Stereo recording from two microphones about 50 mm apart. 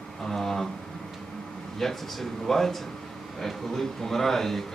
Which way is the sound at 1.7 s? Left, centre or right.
Centre.